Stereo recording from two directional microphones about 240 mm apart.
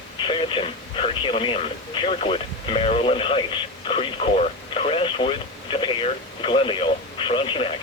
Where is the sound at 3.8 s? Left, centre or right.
Left.